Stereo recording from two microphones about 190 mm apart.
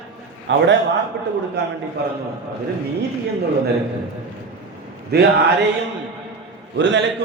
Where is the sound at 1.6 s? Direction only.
60° right (ahead or behind).